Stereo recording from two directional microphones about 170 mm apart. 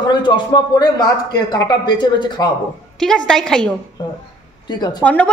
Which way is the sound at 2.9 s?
5° left (ahead or behind).